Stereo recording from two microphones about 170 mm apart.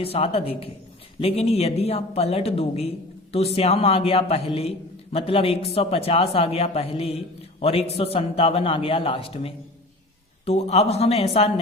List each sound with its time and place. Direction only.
0.0 s speech: 35° left (ahead or behind)